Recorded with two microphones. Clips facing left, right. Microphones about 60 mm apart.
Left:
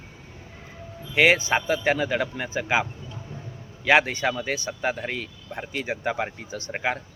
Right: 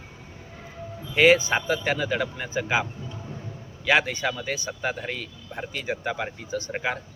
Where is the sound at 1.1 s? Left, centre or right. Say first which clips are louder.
Right 1 dB; left.